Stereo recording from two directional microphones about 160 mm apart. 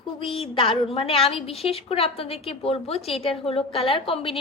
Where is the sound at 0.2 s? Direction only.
35° left (ahead or behind).